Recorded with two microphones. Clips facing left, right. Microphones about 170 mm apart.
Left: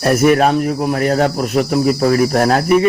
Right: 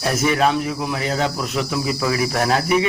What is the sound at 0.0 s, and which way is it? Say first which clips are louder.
Speech: left 7 dB; 55° left (ahead or behind).